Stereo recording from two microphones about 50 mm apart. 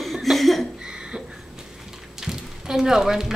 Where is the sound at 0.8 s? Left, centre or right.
Centre.